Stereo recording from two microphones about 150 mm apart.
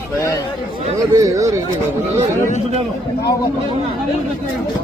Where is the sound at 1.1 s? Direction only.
20° right (ahead or behind).